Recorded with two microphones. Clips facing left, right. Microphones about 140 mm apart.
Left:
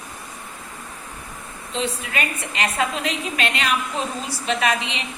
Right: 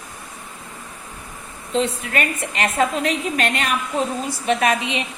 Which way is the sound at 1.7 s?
45° right (ahead or behind).